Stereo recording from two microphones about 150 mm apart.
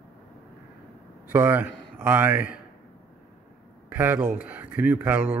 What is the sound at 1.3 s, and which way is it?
Speech, 10° right (ahead or behind).